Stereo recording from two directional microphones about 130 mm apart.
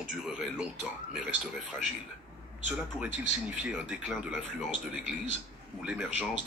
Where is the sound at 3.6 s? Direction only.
5° right (ahead or behind).